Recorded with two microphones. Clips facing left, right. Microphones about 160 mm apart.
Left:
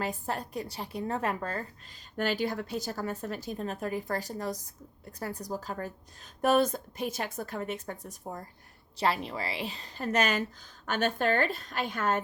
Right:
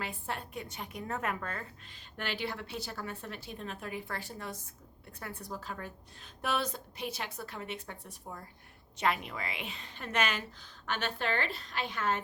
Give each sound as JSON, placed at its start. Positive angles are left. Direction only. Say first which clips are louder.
{"t": 0.0, "sound": "a woman's voice", "louder": "left 6 dB", "side_deg": 40}